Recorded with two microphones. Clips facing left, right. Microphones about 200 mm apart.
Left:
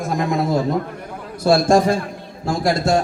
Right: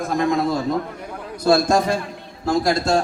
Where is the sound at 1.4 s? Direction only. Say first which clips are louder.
Left 2 dB; 25° left (ahead or behind).